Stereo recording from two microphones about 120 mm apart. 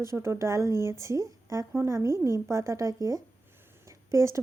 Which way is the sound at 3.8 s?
25° right (ahead or behind).